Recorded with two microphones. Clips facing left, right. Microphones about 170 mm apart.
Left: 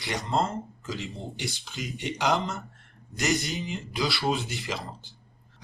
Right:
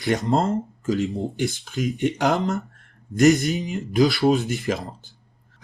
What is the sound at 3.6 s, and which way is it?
Speech, 45° right (ahead or behind).